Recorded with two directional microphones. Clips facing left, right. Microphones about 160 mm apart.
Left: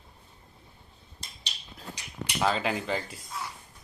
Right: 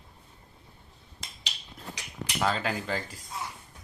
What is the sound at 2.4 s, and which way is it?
Speech, 5° left (ahead or behind).